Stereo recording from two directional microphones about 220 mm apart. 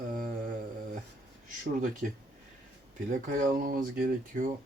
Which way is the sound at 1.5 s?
35° right (ahead or behind).